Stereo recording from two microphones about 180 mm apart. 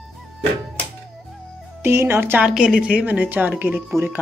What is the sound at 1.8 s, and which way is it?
A woman's voice, 15° right (ahead or behind).